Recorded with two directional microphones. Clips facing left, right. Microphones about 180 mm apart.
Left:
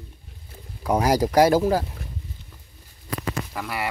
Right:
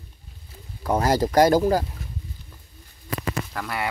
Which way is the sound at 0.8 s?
10° left (ahead or behind).